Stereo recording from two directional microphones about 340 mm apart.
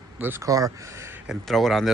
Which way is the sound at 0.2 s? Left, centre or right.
Centre.